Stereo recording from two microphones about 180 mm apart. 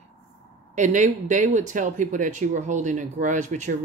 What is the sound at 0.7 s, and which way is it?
Speech, 45° right (ahead or behind).